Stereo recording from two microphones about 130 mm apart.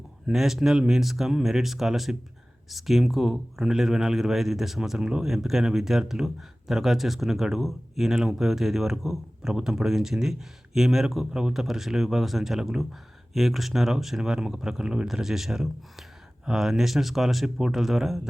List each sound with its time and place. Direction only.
0.3 s speech: centre (ahead or behind)